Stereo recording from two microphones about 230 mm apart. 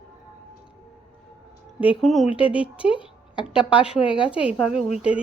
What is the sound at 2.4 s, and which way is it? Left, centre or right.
A woman's voice, left.